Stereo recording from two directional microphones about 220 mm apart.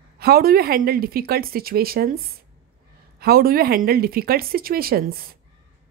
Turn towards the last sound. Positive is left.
turn(degrees=-45)  # may be behind; listen again after turning